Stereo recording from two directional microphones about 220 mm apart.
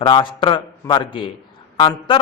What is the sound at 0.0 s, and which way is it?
A man's voice, 25° left (ahead or behind).